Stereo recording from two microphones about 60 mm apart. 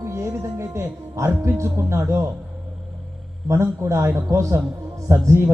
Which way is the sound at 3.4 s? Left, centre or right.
Right.